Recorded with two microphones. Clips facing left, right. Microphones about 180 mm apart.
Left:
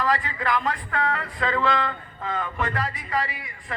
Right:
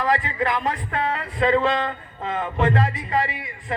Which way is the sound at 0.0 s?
20° right (ahead or behind).